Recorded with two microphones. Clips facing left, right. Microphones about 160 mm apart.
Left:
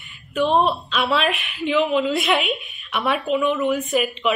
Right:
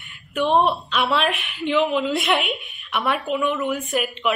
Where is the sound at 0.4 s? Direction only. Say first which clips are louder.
Even; 15° right (ahead or behind).